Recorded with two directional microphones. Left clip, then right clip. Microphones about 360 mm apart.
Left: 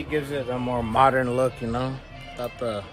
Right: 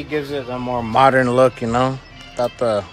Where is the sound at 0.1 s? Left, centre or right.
Centre.